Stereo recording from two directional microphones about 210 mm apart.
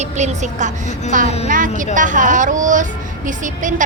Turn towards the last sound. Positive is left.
turn(degrees=-35)  # may be behind; listen again after turning